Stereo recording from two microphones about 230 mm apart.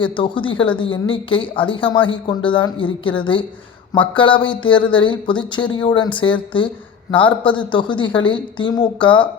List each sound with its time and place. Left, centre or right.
0.0 s a woman's voice: left